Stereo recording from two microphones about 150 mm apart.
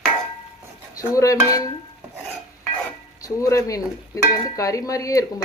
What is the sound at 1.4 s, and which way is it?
Cutlery, 25° left (ahead or behind).